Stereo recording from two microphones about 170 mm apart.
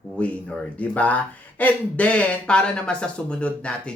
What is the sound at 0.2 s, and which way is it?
Speech, 10° left (ahead or behind).